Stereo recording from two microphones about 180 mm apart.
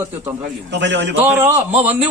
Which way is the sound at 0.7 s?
85° right.